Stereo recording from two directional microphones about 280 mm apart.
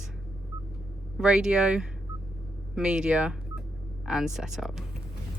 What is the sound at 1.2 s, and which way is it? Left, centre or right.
Speech, centre.